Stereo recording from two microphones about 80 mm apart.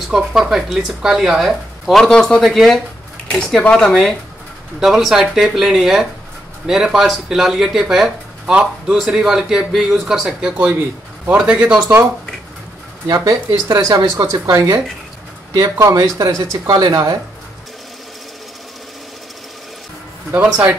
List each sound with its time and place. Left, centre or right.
0.1 s speech: centre
13.1 s speech: right